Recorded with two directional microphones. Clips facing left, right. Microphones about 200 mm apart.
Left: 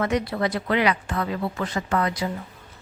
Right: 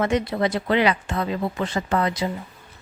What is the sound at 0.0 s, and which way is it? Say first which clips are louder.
Speech: right 2 dB; 25° right (ahead or behind).